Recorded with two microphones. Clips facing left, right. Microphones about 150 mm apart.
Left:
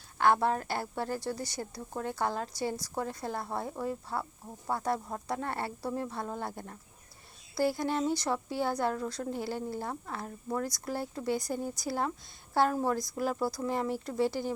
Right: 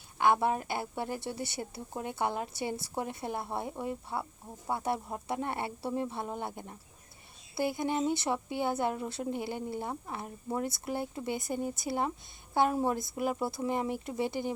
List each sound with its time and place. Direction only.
0.3 s speech: 10° right (ahead or behind)
1.9 s speech: 15° right (ahead or behind)
4.1 s speech: 5° right (ahead or behind)
4.7 s speech: 25° right (ahead or behind)